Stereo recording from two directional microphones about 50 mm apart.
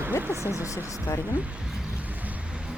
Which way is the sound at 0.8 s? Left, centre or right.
Left.